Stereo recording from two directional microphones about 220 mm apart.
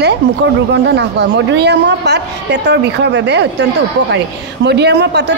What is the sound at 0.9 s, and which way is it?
A woman's voice, 50° right (ahead or behind).